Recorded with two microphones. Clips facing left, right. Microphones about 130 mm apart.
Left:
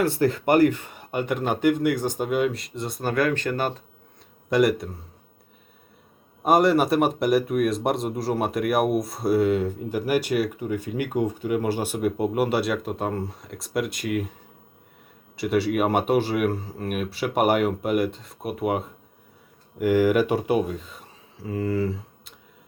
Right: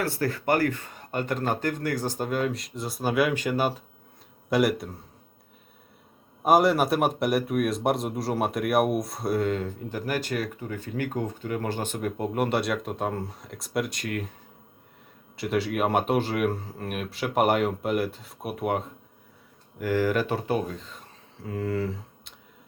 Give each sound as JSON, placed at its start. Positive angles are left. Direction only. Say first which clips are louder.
{"t": 0.0, "sound": "speech", "louder": "left 6 dB", "side_deg": 20}
{"t": 6.4, "sound": "speech", "louder": "left 2 dB", "side_deg": 0}
{"t": 15.4, "sound": "speech", "louder": "left 4 dB", "side_deg": 5}
{"t": 19.8, "sound": "speech", "louder": "left 5 dB", "side_deg": 15}